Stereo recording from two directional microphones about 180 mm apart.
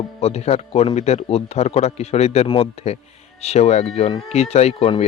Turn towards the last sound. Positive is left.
turn(degrees=30)  # may be behind; listen again after turning